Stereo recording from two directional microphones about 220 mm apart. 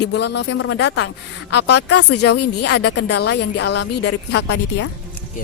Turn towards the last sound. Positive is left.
turn(degrees=50)  # may be behind; listen again after turning